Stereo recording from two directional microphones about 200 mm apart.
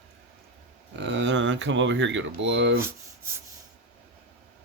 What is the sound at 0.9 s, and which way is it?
Speech, 60° right (ahead or behind).